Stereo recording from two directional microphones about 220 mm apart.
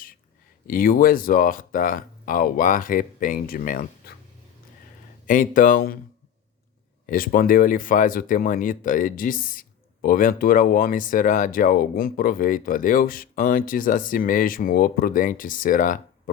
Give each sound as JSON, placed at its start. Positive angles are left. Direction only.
{"t": 0.7, "sound": "speech", "side_deg": 40}
{"t": 5.2, "sound": "speech", "side_deg": 40}
{"t": 7.1, "sound": "speech", "side_deg": 40}